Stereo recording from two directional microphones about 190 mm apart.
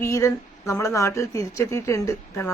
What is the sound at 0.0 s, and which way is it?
Speech, 15° left (ahead or behind).